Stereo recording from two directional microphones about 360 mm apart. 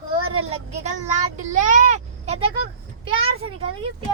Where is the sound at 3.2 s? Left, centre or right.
Centre.